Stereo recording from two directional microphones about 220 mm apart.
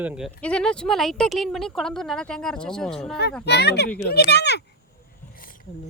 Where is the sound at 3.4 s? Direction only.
50° left (ahead or behind).